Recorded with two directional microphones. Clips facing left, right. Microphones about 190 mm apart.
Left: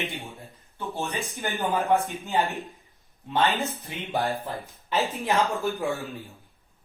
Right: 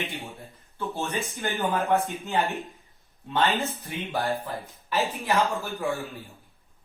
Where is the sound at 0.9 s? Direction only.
15° left (ahead or behind).